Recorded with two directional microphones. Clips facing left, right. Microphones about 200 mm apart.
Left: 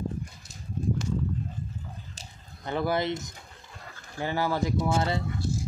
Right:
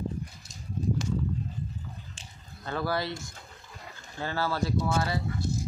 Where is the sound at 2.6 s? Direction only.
20° left (ahead or behind).